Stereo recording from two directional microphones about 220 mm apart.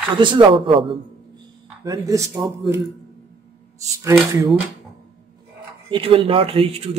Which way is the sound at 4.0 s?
10° right (ahead or behind).